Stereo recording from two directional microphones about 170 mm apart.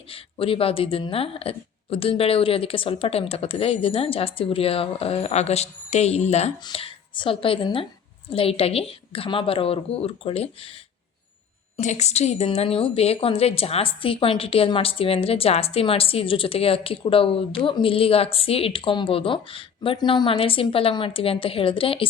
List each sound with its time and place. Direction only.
0.1 s a woman's voice: 30° left (ahead or behind)
11.8 s a woman's voice: 45° left (ahead or behind)